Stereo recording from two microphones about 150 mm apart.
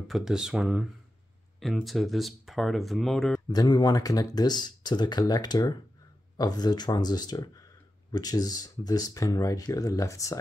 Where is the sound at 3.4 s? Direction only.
30° left (ahead or behind).